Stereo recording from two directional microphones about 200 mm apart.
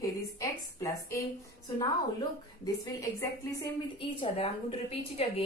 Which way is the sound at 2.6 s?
15° left (ahead or behind).